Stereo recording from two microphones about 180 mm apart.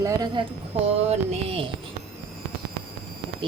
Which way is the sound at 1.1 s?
30° right (ahead or behind).